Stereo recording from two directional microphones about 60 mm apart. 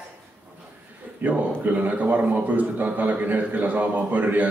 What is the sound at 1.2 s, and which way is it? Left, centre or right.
A man's voice, right.